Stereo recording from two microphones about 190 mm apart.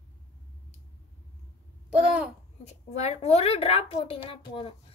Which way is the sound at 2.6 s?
35° left (ahead or behind).